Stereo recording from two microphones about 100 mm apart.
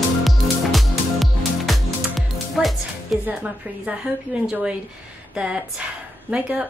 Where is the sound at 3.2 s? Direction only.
15° right (ahead or behind).